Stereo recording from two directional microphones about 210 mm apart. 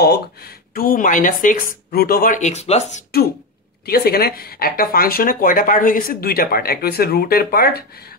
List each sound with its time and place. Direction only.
0.7 s speech: 40° left (ahead or behind)
3.8 s speech: 45° left (ahead or behind)